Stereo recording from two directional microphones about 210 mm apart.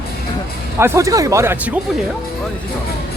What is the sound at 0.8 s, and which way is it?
Speech, 15° right (ahead or behind).